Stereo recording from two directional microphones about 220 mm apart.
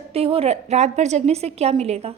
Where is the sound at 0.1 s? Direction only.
25° right (ahead or behind).